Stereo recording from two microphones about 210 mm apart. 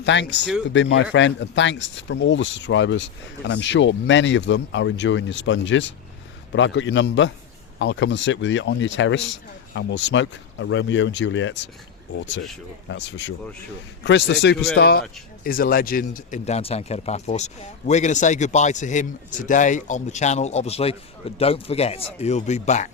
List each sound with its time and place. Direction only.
0.0 s speech: 55° left (ahead or behind); by 22.9 s 35° left (ahead or behind)